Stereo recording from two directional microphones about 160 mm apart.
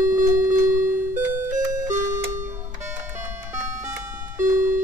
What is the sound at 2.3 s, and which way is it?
Music, 50° right (ahead or behind).